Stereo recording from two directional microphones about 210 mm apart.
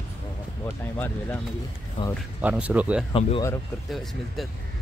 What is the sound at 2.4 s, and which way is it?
Speech, 5° right (ahead or behind).